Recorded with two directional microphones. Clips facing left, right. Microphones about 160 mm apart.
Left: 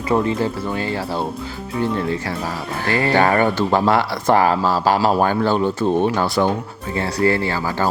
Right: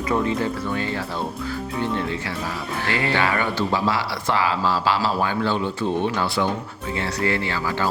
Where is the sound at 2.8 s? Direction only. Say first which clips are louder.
Left 6 dB; 40° left (ahead or behind).